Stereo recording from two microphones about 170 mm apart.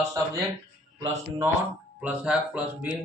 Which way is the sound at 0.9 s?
20° right (ahead or behind).